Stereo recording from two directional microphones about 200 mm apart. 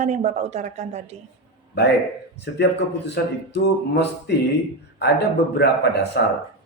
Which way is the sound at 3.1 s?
60° left (ahead or behind).